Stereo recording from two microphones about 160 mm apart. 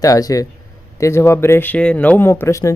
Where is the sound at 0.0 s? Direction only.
20° left (ahead or behind).